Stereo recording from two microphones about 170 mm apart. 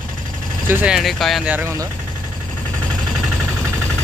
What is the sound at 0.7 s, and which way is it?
Speech, 10° right (ahead or behind).